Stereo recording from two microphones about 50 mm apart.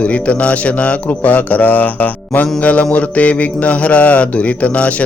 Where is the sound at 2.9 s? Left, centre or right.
Left.